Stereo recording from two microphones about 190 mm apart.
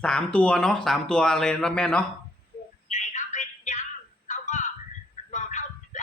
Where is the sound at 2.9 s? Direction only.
40° left (ahead or behind).